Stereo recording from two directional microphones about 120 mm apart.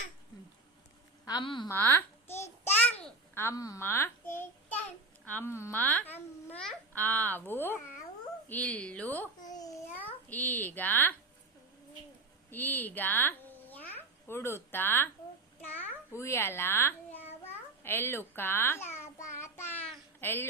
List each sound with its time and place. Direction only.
1.2 s a woman's voice: 35° left (ahead or behind)
1.7 s babbling: 15° left (ahead or behind)
3.3 s a child's voice: 25° left (ahead or behind)
9.5 s babbling: 30° left (ahead or behind)
10.0 s a child's voice: 15° left (ahead or behind)
12.5 s a child's voice: 15° left (ahead or behind)
18.9 s babbling: 75° left (ahead or behind)
19.4 s child singing: 20° left (ahead or behind)
20.2 s a woman's voice: 20° left (ahead or behind)